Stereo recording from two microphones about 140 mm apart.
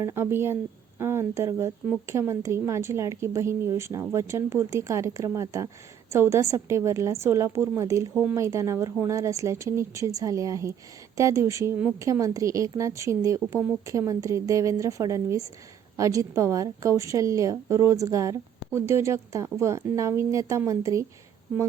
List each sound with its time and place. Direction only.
0.0 s a woman's voice: 20° right (ahead or behind)